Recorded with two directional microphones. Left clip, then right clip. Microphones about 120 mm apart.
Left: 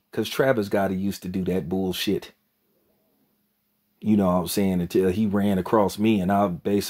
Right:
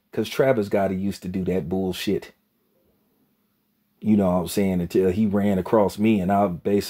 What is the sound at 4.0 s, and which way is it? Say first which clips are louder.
Speech: right 1 dB; centre (ahead or behind).